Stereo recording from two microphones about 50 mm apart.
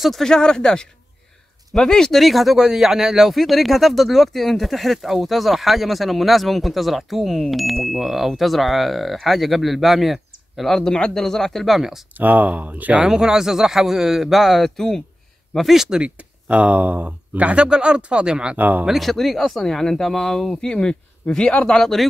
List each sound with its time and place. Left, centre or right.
0.2 s speech: centre
2.2 s speech: centre
10.9 s speech: centre
12.2 s speech: right
13.0 s a man's voice: centre
15.7 s a man's voice: centre
16.0 s speech: right
17.5 s speech: centre
18.6 s speech: right
18.9 s speech: centre
20.6 s speech: centre
21.7 s speech: centre